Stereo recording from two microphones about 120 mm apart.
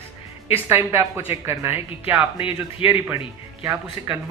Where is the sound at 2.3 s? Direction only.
45° left (ahead or behind).